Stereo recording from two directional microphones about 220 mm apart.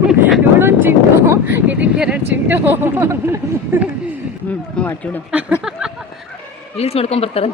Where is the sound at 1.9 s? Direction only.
5° right (ahead or behind).